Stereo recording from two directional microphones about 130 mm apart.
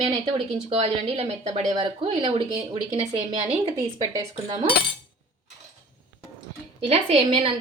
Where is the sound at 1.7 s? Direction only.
40° right (ahead or behind).